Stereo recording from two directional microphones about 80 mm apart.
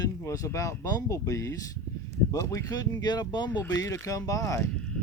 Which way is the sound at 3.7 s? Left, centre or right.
Left.